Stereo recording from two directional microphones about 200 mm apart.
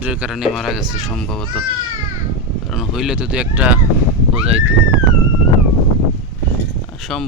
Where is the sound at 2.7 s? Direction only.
Centre (ahead or behind).